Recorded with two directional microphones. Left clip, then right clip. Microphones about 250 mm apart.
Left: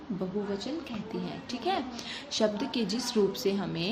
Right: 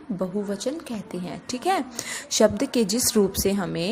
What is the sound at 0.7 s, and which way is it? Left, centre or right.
A woman's voice, right.